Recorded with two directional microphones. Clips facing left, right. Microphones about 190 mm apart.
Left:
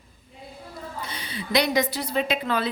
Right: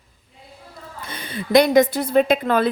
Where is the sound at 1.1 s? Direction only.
50° right (ahead or behind).